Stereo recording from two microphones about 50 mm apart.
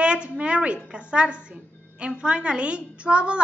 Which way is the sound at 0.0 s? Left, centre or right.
Right.